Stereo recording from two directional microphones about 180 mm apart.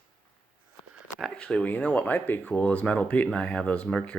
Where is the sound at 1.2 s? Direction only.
5° left (ahead or behind).